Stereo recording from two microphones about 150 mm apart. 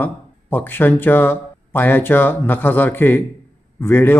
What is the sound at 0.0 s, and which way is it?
Speech, 10° left (ahead or behind).